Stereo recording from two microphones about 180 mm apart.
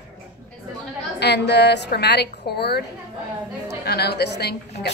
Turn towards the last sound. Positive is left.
turn(degrees=65)  # may be behind; listen again after turning